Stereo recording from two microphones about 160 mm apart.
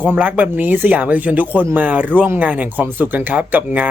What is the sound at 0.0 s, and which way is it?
Speech, 10° right (ahead or behind).